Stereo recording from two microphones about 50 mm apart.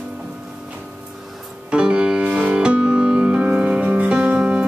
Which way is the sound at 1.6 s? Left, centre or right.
Centre.